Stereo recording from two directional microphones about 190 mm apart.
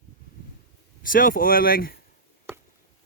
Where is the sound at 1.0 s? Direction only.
45° left (ahead or behind).